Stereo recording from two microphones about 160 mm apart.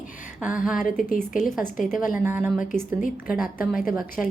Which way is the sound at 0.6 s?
5° right (ahead or behind).